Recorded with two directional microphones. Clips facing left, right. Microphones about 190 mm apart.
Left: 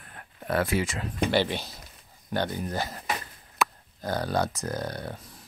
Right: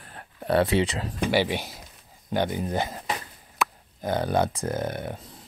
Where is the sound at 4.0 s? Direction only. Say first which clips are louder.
Right 3 dB; 20° right (ahead or behind).